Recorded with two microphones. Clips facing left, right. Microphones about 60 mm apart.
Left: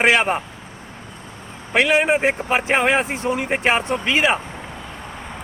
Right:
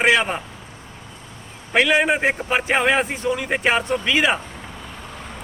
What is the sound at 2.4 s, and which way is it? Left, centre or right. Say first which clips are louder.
Speech: left 1 dB; left.